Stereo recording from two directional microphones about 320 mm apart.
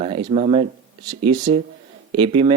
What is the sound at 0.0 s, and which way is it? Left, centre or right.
Speech, centre.